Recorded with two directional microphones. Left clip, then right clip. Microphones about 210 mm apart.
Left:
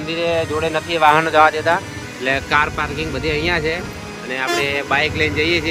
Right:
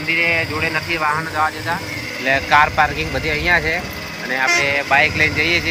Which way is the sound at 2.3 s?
10° left (ahead or behind).